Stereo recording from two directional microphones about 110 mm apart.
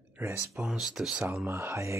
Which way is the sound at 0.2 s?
20° right (ahead or behind).